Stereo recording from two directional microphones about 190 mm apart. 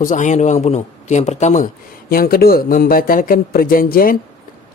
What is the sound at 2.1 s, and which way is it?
A man's voice, 50° left (ahead or behind).